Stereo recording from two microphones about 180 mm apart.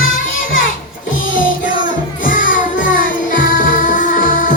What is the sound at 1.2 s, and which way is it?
Music, 50° left (ahead or behind).